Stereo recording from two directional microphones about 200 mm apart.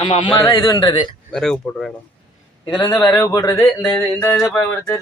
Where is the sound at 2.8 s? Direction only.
10° left (ahead or behind).